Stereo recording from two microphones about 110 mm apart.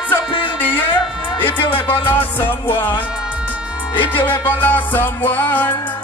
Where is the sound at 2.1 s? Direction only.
15° left (ahead or behind).